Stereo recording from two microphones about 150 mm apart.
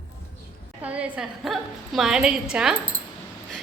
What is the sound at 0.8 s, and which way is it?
A woman's voice, 10° right (ahead or behind).